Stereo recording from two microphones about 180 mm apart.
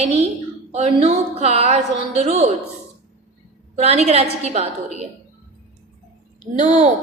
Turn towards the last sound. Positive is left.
turn(degrees=-40)  # may be behind; listen again after turning